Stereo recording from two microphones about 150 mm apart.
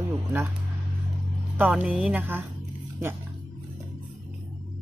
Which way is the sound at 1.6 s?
10° right (ahead or behind).